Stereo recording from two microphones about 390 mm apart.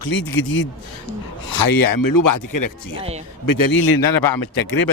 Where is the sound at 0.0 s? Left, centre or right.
Left.